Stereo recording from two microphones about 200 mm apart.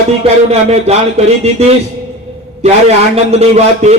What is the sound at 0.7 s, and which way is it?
Speech, 30° right (ahead or behind).